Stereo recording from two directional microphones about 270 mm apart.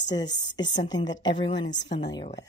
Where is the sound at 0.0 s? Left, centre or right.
Centre.